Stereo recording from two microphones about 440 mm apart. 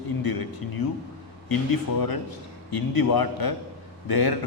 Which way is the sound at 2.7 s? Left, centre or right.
Left.